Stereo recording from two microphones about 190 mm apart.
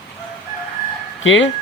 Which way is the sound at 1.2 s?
85° left.